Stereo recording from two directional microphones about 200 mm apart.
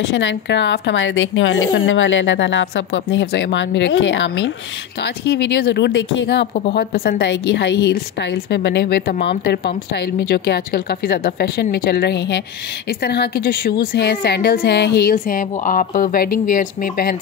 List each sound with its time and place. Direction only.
0.1 s a woman's voice: 65° left (ahead or behind)
6.7 s a woman's voice: 50° left (ahead or behind)